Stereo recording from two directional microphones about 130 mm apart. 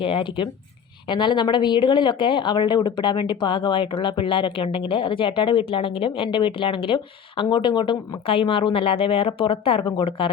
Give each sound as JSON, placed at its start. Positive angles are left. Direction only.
{"t": 0.0, "sound": "speech", "side_deg": 40}